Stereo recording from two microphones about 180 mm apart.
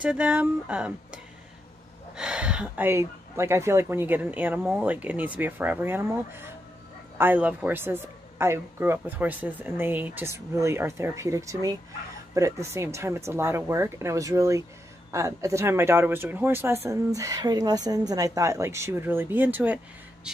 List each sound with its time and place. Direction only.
0.0 s speech: 10° right (ahead or behind)